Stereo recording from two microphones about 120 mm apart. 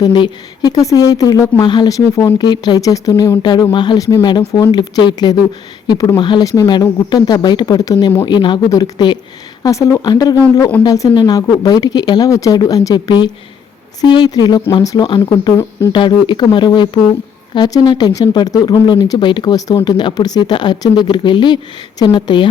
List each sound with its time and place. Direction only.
0.0 s speech: 35° left (ahead or behind)
3.4 s speech: 40° left (ahead or behind)
8.2 s speech: 40° left (ahead or behind)